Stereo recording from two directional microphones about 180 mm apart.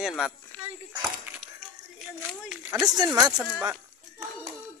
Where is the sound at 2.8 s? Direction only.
20° right (ahead or behind).